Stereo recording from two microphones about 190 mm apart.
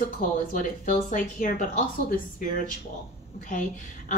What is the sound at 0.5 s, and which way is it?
A woman's voice, 45° left (ahead or behind).